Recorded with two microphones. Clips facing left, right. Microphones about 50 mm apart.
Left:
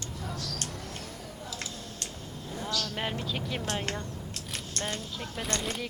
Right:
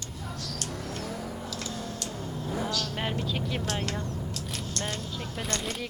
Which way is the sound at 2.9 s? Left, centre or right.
Centre.